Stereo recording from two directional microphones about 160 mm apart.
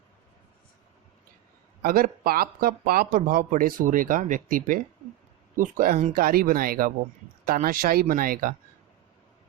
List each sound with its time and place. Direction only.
1.8 s speech: 65° right (ahead or behind)